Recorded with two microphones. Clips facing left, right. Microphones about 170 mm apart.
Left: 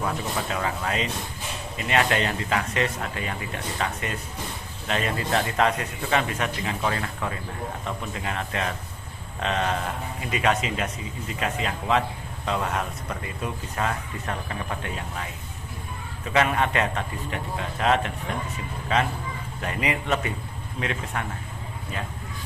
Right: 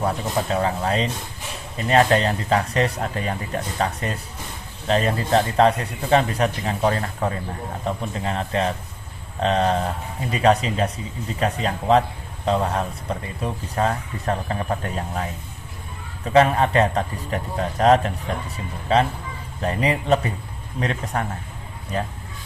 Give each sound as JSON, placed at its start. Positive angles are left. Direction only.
{"t": 0.0, "sound": "speech", "side_deg": -35}
{"t": 16.3, "sound": "speech", "side_deg": -35}